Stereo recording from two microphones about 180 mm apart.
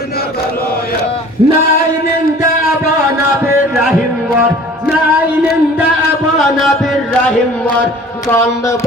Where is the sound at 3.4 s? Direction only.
15° right (ahead or behind).